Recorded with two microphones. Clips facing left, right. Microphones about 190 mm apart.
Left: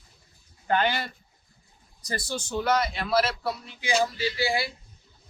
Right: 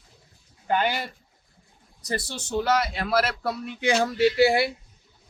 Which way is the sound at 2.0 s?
65° right (ahead or behind).